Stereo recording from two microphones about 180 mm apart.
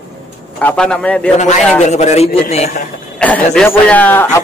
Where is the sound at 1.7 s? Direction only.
40° left (ahead or behind).